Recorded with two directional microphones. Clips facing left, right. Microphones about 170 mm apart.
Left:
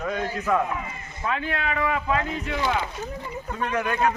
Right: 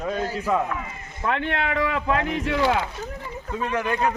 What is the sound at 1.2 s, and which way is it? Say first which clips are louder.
Speech: right 2 dB; 70° right (ahead or behind).